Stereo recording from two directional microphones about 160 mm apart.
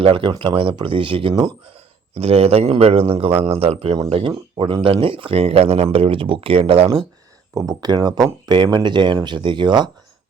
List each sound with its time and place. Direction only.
0.0 s speech: 35° right (ahead or behind)
2.1 s speech: 40° right (ahead or behind)
7.5 s speech: 20° right (ahead or behind)